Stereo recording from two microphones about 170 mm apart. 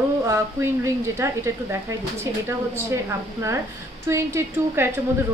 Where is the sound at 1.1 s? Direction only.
15° right (ahead or behind).